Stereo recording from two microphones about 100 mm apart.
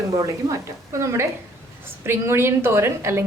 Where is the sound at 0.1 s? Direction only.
35° right (ahead or behind).